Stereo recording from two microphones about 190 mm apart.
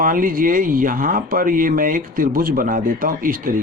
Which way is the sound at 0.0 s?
45° right (ahead or behind).